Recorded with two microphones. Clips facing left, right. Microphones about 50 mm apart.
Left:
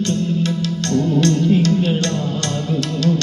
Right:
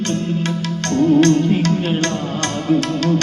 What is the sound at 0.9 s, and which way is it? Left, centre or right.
Music, right.